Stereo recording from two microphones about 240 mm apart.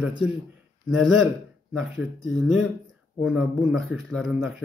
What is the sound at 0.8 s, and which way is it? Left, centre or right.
Speech, centre.